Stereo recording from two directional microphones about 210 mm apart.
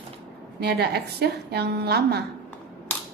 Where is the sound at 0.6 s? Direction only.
50° right (ahead or behind).